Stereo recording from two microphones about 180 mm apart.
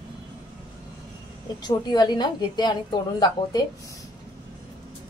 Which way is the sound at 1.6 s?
25° left (ahead or behind).